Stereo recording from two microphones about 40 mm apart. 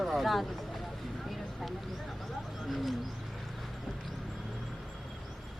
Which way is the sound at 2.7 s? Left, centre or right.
Centre.